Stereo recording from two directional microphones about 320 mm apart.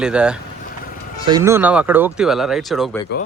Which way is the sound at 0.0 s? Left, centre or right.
Centre.